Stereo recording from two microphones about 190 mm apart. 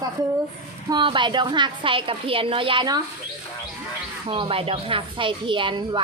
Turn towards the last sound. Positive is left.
turn(degrees=-25)  # may be behind; listen again after turning